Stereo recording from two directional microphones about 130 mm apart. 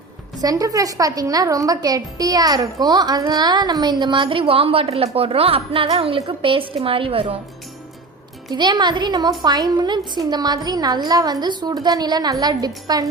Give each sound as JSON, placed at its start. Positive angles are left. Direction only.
{"t": 0.4, "sound": "a woman's voice", "side_deg": -30}
{"t": 8.4, "sound": "a woman's voice", "side_deg": -35}